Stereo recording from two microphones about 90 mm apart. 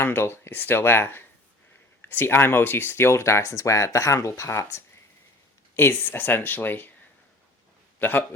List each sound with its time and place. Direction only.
0.0 s speech: 25° left (ahead or behind)
7.9 s a man's voice: 20° left (ahead or behind)